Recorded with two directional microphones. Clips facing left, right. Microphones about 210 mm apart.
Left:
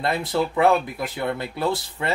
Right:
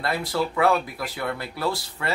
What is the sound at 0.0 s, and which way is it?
Speech, 20° left (ahead or behind).